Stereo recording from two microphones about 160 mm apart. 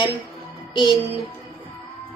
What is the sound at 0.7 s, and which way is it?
Music, 30° left (ahead or behind).